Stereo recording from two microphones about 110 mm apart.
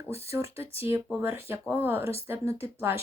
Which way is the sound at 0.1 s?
25° right (ahead or behind).